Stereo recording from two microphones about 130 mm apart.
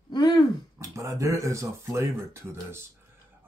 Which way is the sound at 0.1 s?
35° left (ahead or behind).